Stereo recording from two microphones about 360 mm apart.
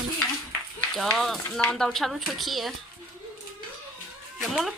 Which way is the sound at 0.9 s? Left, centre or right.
Centre.